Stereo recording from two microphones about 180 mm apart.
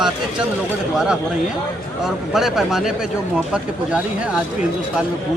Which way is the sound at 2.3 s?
Centre (ahead or behind).